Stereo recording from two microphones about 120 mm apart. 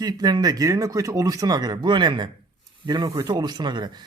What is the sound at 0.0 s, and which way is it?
Speech, 35° right (ahead or behind).